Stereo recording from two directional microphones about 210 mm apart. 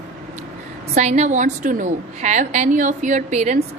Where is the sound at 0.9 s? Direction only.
35° right (ahead or behind).